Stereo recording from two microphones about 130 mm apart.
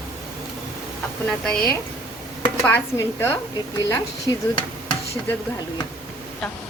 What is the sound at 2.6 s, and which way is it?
Speech, 15° left (ahead or behind).